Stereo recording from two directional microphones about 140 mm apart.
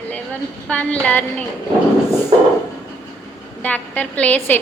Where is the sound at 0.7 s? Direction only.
10° left (ahead or behind).